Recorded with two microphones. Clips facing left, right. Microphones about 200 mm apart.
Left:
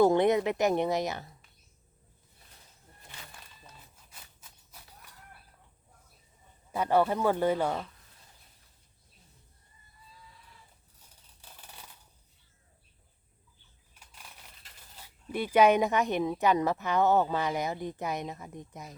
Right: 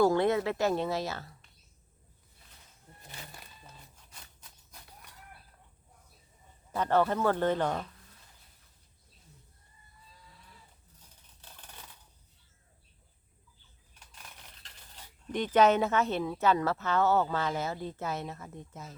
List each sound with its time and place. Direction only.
0.0 s speech: 20° left (ahead or behind)
3.9 s a sound: 5° left (ahead or behind)
6.7 s speech: 10° left (ahead or behind)
14.2 s speech: 5° left (ahead or behind)